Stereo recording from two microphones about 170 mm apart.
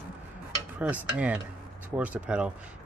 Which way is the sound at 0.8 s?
10° right (ahead or behind).